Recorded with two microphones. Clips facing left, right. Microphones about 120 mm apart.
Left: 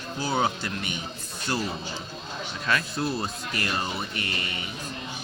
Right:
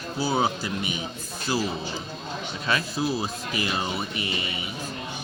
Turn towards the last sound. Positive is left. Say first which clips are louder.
# right 2 dB
turn(degrees=-10)  # may be behind; listen again after turning